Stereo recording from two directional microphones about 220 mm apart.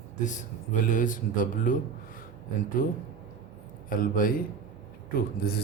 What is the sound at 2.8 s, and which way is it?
A man's voice, 40° left (ahead or behind).